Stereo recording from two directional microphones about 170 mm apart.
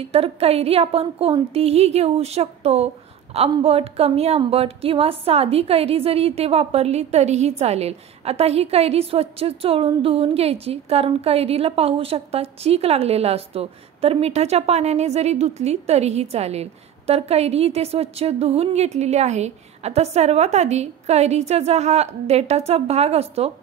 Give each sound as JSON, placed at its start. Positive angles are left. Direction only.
{"t": 0.0, "sound": "a woman's voice", "side_deg": -35}